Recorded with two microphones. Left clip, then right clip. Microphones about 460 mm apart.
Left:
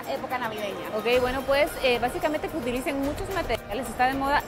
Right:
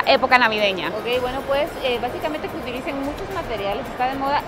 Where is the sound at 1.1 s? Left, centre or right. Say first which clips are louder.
Even; left.